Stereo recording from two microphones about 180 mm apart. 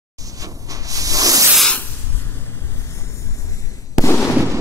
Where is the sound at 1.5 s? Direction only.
5° left (ahead or behind).